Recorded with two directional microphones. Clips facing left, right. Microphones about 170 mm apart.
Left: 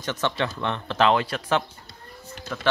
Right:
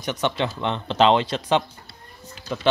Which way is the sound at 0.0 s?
15° right (ahead or behind).